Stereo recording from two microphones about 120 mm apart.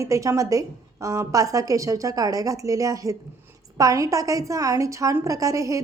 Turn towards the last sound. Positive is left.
turn(degrees=-25)  # may be behind; listen again after turning